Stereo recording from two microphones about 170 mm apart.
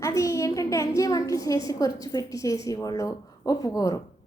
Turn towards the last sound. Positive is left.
turn(degrees=20)  # may be behind; listen again after turning